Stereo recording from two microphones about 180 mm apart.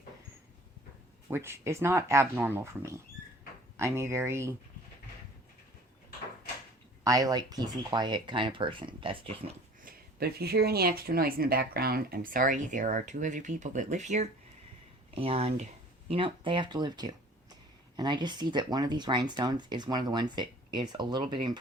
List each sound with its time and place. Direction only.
1.3 s speech: 15° right (ahead or behind)
7.0 s speech: 20° right (ahead or behind)
9.8 s speech: 60° right (ahead or behind); by 21.6 s 25° right (ahead or behind)